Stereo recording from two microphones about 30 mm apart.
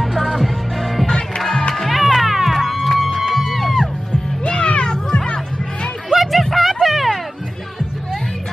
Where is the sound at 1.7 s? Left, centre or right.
Centre.